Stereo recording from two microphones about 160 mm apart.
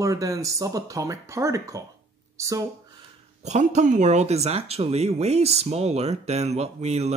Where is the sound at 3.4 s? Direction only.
45° right (ahead or behind).